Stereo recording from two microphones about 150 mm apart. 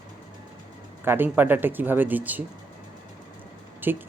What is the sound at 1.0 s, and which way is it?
Speech, 15° right (ahead or behind).